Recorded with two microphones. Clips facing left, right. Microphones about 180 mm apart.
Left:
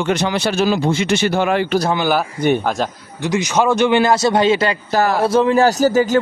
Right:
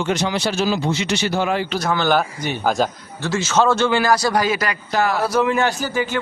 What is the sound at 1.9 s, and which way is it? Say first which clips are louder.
Speech: right 4 dB; 10° left (ahead or behind).